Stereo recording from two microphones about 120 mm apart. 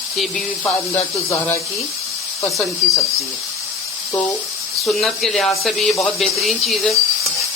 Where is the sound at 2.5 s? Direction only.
Centre (ahead or behind).